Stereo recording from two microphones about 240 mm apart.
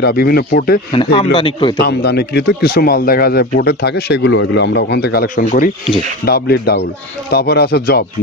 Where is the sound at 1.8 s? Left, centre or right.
Left.